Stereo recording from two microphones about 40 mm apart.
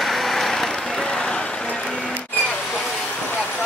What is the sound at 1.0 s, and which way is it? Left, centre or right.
Vehicle, left.